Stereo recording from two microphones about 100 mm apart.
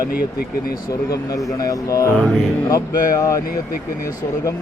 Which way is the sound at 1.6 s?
35° left (ahead or behind).